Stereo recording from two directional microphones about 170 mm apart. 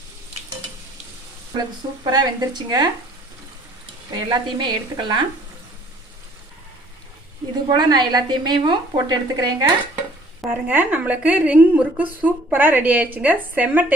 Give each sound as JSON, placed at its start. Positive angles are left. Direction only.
{"t": 2.0, "sound": "a woman's voice", "side_deg": -25}
{"t": 4.1, "sound": "a woman's voice", "side_deg": -25}
{"t": 7.7, "sound": "a woman's voice", "side_deg": -25}
{"t": 10.4, "sound": "a woman's voice", "side_deg": -10}